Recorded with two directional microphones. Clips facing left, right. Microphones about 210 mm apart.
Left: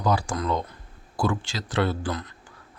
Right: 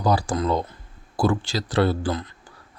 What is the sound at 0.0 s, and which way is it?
Speech, 35° right (ahead or behind).